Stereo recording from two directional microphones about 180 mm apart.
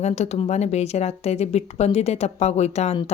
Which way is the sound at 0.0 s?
40° left (ahead or behind).